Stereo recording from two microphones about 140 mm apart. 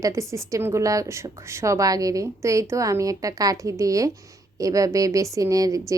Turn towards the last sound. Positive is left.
turn(degrees=-25)  # may be behind; listen again after turning